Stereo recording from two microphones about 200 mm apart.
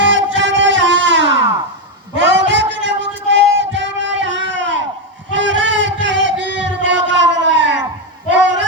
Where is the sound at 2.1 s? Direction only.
65° right (ahead or behind).